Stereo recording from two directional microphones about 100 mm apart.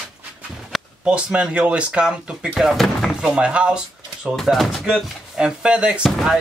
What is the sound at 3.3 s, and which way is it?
Speech, 10° right (ahead or behind).